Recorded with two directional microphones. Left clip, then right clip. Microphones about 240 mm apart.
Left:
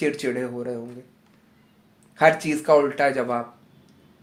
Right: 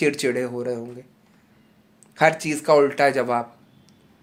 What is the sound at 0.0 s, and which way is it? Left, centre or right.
Speech, right.